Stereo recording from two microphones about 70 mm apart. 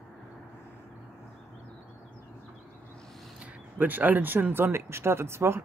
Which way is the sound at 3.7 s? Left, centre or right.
Right.